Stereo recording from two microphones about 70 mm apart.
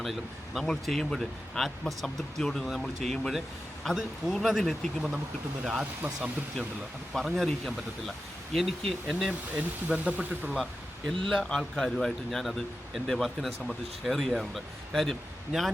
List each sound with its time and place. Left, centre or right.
0.0 s speech: centre
5.6 s speech: centre
7.1 s speech: centre
9.6 s speech: right
10.5 s speech: centre